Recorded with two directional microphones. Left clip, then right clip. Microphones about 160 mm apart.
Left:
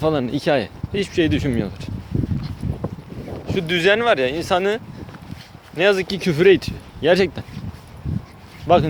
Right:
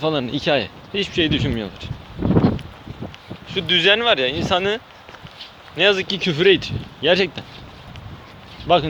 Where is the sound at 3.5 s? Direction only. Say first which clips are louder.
Right 1 dB; 45° left (ahead or behind).